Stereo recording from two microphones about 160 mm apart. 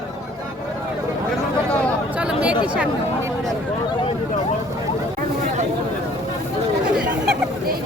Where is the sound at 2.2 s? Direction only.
5° right (ahead or behind).